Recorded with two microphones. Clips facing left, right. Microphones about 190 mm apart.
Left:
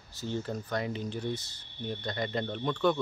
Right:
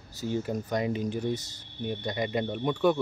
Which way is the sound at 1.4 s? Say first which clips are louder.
Right 6 dB; 40° right (ahead or behind).